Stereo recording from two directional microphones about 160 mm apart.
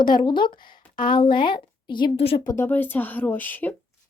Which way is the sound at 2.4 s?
15° left (ahead or behind).